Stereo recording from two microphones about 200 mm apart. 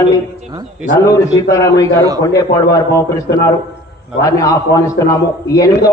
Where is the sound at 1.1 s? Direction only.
15° left (ahead or behind).